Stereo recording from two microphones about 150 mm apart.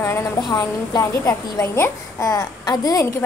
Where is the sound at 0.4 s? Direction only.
25° left (ahead or behind).